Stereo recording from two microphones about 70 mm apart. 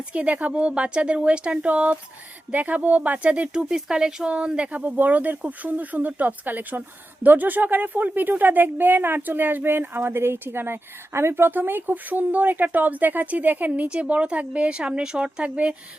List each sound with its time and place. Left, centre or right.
0.1 s speech: centre